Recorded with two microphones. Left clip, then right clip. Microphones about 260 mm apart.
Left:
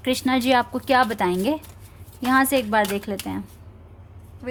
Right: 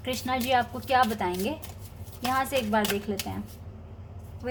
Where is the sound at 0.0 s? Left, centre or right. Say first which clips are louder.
Left 7 dB; left.